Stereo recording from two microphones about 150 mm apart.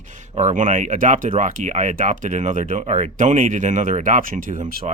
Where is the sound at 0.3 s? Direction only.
55° right (ahead or behind).